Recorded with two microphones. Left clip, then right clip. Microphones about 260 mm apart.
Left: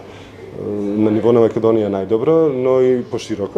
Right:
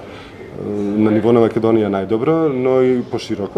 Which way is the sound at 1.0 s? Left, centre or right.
Centre.